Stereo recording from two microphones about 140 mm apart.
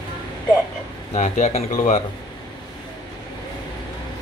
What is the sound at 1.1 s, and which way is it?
Speech, 50° left (ahead or behind).